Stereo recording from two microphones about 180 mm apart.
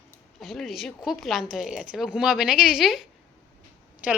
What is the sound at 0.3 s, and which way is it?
A woman's voice, centre (ahead or behind).